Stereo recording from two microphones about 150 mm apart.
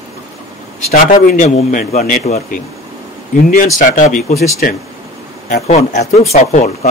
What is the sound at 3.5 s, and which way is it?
A man's voice, 60° left (ahead or behind).